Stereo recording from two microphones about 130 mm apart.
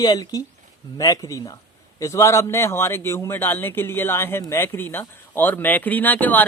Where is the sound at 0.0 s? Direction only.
30° left (ahead or behind).